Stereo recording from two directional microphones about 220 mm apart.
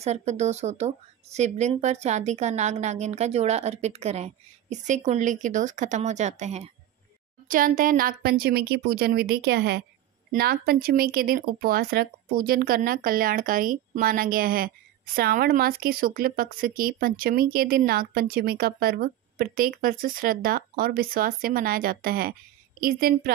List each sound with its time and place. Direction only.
0.0 s speech: 30° right (ahead or behind)